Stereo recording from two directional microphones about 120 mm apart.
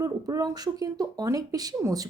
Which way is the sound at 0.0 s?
30° right (ahead or behind).